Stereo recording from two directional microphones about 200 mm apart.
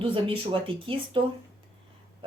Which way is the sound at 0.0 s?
25° right (ahead or behind).